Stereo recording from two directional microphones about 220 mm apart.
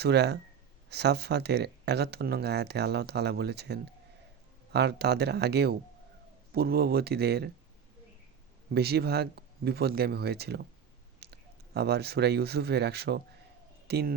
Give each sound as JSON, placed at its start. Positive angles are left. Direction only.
{"t": 0.0, "sound": "speech", "side_deg": -50}
{"t": 8.7, "sound": "speech", "side_deg": -45}